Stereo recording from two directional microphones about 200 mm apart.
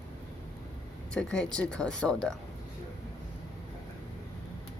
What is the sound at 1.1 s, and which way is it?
A woman's voice, 5° left (ahead or behind).